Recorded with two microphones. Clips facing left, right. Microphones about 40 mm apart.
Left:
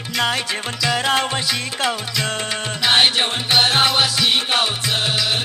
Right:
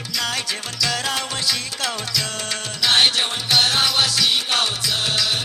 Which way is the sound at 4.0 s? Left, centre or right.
Centre.